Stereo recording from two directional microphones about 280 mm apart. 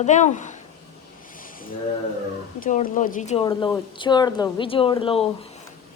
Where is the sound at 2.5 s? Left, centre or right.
Left.